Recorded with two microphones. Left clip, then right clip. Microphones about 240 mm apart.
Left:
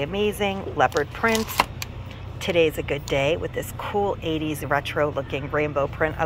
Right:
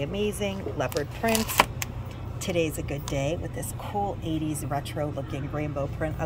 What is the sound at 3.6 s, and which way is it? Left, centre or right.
Speech, left.